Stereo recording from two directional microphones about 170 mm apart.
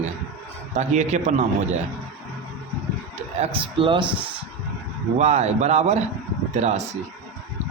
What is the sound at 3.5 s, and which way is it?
Speech, 30° right (ahead or behind).